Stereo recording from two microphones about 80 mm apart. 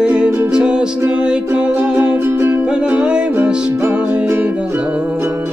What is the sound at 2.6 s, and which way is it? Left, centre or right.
Music, centre.